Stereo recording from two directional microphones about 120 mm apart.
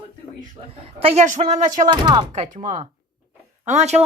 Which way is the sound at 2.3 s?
90° right.